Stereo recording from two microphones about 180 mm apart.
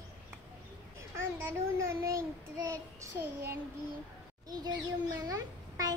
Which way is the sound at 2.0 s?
15° right (ahead or behind).